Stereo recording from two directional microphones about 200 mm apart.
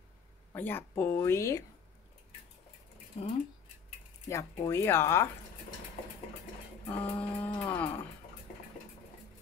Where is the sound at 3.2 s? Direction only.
30° left (ahead or behind).